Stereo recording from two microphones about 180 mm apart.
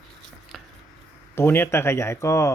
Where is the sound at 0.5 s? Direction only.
Centre (ahead or behind).